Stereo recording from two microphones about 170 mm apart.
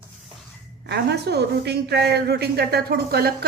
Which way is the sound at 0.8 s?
75° right (ahead or behind).